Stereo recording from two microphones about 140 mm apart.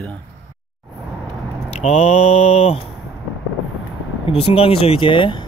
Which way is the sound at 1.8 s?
55° left (ahead or behind).